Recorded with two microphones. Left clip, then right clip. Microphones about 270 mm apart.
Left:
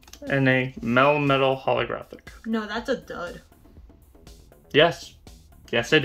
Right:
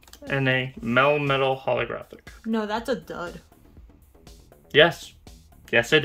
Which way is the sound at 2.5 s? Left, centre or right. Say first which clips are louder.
Right 1 dB; right.